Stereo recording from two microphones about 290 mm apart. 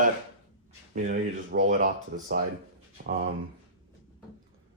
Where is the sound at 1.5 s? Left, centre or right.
Right.